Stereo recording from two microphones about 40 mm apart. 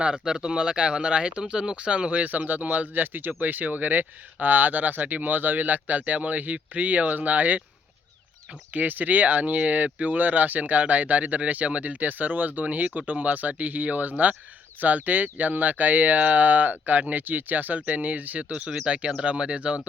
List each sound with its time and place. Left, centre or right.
0.0 s speech: centre
2.3 s speech: right
8.7 s speech: right
17.2 s speech: right